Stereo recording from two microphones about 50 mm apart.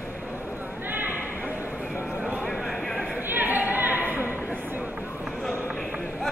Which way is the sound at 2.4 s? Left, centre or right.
Centre.